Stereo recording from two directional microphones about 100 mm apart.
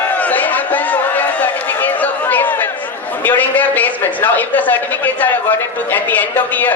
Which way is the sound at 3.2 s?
20° left (ahead or behind).